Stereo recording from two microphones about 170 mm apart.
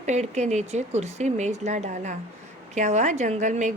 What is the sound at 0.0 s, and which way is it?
A woman's voice, 40° right (ahead or behind).